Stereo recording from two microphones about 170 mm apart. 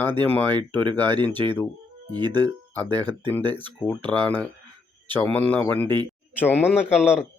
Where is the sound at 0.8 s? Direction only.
25° right (ahead or behind).